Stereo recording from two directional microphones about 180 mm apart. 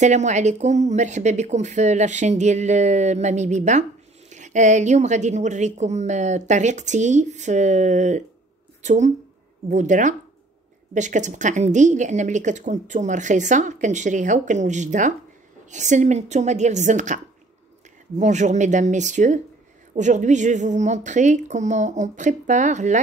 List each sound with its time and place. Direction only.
0.0 s a woman's voice: 40° right (ahead or behind)